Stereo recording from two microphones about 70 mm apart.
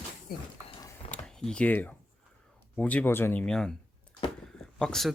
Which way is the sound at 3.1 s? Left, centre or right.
Left.